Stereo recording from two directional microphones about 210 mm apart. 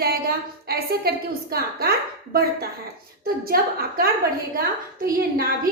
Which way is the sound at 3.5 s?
45° right (ahead or behind).